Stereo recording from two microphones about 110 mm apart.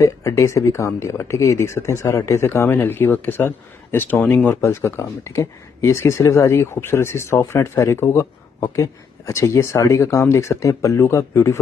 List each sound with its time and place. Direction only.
0.0 s speech: 30° left (ahead or behind); by 4.6 s 10° left (ahead or behind)
4.6 s speech: 25° left (ahead or behind)